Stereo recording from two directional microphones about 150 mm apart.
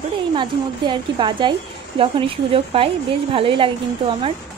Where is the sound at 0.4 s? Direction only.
30° right (ahead or behind).